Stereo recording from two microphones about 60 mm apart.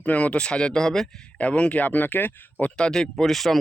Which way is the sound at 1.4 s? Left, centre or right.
Left.